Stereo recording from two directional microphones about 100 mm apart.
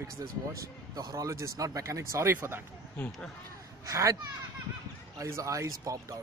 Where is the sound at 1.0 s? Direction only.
35° right (ahead or behind).